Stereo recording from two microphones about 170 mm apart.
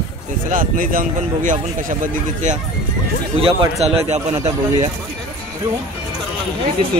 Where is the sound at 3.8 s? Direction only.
35° right (ahead or behind).